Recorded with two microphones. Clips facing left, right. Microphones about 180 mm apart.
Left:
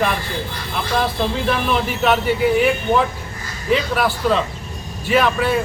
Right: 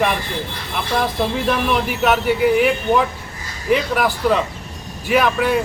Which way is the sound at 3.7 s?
10° right (ahead or behind).